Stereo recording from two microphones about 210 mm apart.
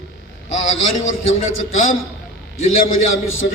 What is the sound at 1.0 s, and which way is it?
Speech, 70° left (ahead or behind).